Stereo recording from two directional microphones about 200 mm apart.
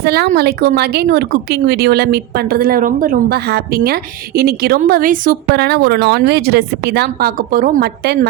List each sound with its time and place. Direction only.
0.0 s speech: 50° right (ahead or behind)